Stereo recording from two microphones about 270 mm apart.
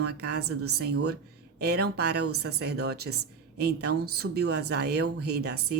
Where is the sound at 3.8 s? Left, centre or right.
Right.